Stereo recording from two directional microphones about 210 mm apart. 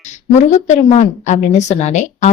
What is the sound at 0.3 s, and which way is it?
A woman's voice, 35° left (ahead or behind).